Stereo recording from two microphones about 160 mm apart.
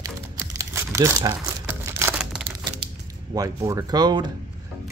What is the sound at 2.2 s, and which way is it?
Tearing, 5° right (ahead or behind).